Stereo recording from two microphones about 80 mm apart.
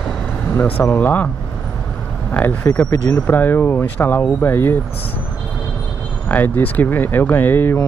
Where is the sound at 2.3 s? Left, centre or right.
Left.